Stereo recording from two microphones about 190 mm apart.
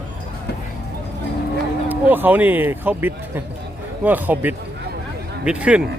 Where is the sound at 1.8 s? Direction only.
10° right (ahead or behind).